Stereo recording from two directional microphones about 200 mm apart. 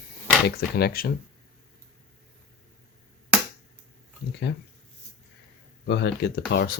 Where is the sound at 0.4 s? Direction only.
50° left (ahead or behind).